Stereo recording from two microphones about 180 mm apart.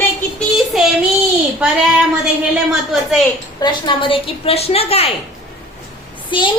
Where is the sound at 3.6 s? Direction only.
25° left (ahead or behind).